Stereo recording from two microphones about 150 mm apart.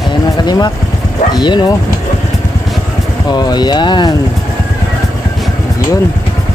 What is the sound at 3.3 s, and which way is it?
Speech, 30° left (ahead or behind).